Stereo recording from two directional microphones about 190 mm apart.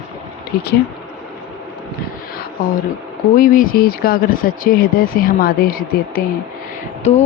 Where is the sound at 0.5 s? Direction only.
55° left (ahead or behind).